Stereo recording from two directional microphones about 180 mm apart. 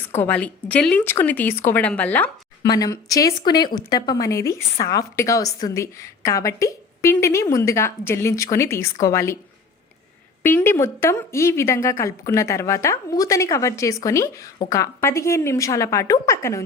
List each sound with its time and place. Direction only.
0.1 s a woman's voice: 10° left (ahead or behind)
2.6 s a woman's voice: 20° left (ahead or behind)
10.4 s a woman's voice: 10° left (ahead or behind)